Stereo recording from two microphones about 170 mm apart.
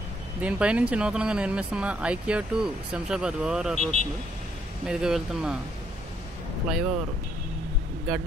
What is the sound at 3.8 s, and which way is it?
Speech, 40° right (ahead or behind).